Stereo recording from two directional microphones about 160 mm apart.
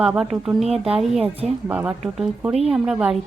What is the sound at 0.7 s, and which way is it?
Speech, 40° right (ahead or behind).